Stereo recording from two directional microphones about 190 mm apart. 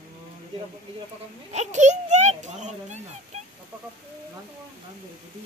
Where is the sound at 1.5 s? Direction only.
40° right (ahead or behind).